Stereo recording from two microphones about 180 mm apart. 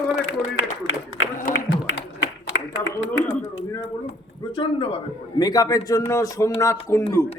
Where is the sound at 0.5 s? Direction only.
90° left.